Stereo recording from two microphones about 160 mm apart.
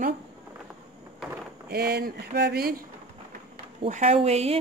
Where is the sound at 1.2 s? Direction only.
Centre (ahead or behind).